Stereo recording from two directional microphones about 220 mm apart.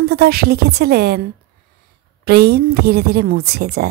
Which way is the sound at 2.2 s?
45° right (ahead or behind).